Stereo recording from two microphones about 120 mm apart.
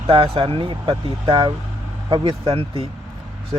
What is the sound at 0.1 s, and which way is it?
Speech, 35° right (ahead or behind).